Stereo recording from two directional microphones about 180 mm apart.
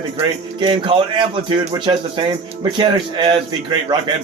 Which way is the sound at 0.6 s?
25° right (ahead or behind).